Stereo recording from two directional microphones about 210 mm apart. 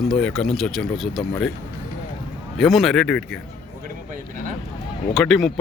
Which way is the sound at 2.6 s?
Centre (ahead or behind).